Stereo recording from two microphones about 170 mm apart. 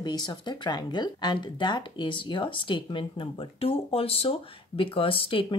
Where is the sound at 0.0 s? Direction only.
25° left (ahead or behind).